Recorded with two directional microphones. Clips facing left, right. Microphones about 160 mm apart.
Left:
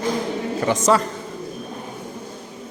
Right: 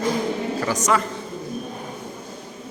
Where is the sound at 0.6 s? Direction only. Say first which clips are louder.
Left 5 dB; 25° left (ahead or behind).